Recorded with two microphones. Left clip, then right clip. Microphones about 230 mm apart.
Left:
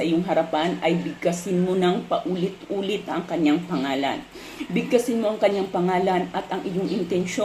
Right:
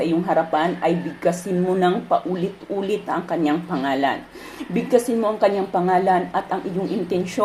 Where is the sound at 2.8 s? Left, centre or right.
Centre.